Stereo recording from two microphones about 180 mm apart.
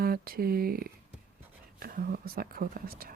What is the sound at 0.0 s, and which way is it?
Speech, 55° right (ahead or behind).